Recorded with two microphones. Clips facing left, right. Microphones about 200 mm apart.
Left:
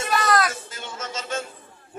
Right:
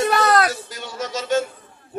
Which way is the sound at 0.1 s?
60° right (ahead or behind).